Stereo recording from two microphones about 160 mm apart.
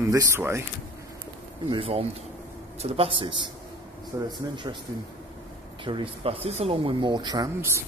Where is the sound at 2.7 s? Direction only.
40° right (ahead or behind).